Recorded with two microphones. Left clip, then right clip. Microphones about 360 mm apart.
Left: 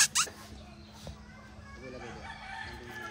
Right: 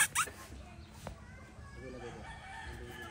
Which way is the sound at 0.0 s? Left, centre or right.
Centre.